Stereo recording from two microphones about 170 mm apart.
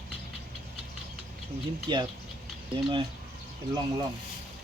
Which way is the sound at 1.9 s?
25° right (ahead or behind).